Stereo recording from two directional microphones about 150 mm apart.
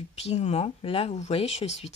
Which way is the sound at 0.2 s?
40° left (ahead or behind).